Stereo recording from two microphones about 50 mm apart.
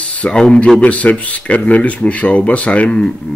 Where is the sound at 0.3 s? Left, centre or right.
Centre.